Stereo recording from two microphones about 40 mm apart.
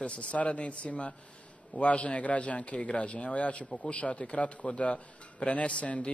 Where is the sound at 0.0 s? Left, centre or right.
Left.